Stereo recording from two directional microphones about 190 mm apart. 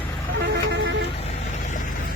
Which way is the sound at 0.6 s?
65° right (ahead or behind).